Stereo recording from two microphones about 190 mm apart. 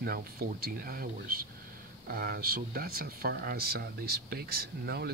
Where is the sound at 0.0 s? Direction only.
50° right (ahead or behind).